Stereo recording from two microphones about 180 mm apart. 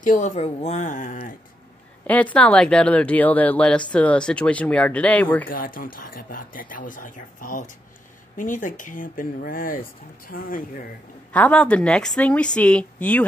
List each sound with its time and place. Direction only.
0.0 s speech: 45° left (ahead or behind)
2.0 s speech: 10° left (ahead or behind)
5.5 s speech: 50° left (ahead or behind)
11.3 s a woman's voice: 5° left (ahead or behind)